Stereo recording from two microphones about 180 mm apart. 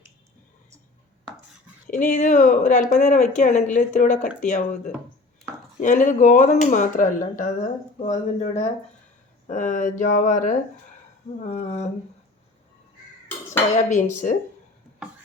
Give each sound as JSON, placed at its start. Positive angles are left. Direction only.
{"t": 1.9, "sound": "speech", "side_deg": 45}
{"t": 5.8, "sound": "speech", "side_deg": 45}
{"t": 8.4, "sound": "a sound", "side_deg": 40}
{"t": 9.5, "sound": "speech", "side_deg": 45}
{"t": 11.4, "sound": "a sound", "side_deg": 40}
{"t": 13.7, "sound": "speech", "side_deg": 45}